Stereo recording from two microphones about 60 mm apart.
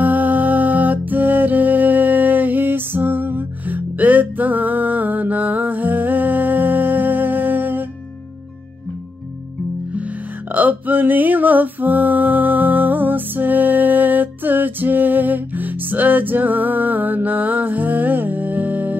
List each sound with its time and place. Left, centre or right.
0.0 s music: right
9.9 s music: right